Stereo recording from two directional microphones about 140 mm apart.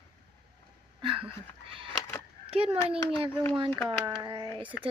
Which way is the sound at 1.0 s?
40° right (ahead or behind).